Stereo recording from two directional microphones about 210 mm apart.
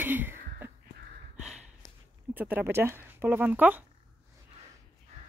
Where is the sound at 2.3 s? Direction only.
10° right (ahead or behind).